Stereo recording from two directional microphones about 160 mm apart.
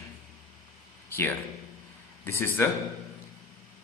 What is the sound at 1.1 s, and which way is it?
A man's voice, 15° left (ahead or behind).